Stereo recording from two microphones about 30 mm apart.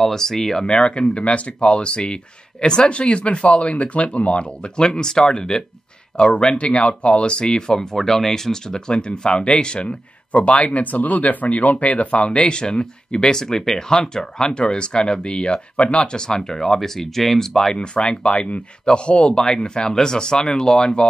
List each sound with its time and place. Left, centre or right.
0.0 s speech: centre
0.7 s speech: left
2.9 s speech: left
4.7 s speech: left
10.8 s speech: left
12.3 s speech: left; by 17.5 s centre
17.7 s speech: left
19.3 s speech: left